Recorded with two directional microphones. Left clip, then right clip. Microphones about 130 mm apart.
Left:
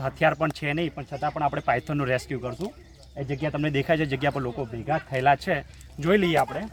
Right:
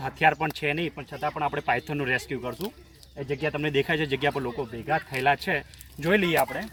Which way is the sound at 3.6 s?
30° left (ahead or behind).